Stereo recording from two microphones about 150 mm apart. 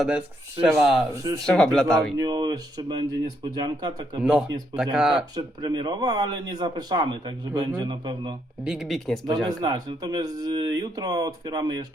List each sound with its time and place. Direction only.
0.8 s speech: 5° right (ahead or behind)
1.1 s speech: 25° right (ahead or behind)
1.5 s speech: 5° left (ahead or behind)
2.1 s speech: 25° right (ahead or behind)
4.2 s speech: 5° right (ahead or behind)
5.1 s speech: 30° right (ahead or behind)
8.6 s speech: 5° right (ahead or behind)
9.5 s speech: 25° right (ahead or behind)